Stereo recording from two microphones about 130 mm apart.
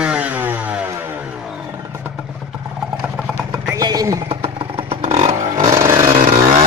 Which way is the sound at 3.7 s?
30° right (ahead or behind).